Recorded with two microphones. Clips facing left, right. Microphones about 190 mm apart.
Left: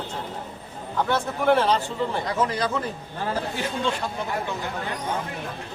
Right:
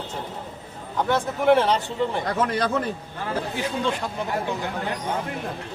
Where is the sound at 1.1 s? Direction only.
15° right (ahead or behind).